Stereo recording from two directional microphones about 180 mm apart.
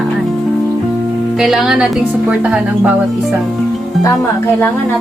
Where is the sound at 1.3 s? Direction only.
5° right (ahead or behind).